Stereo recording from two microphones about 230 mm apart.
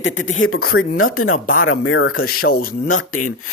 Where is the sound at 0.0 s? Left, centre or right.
Left.